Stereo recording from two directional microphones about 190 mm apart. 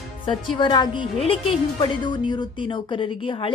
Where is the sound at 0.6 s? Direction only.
25° left (ahead or behind).